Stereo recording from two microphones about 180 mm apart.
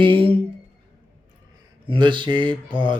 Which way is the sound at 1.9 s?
25° right (ahead or behind).